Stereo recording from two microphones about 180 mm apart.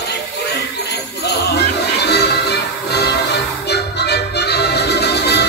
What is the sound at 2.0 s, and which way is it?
Music, 65° left (ahead or behind).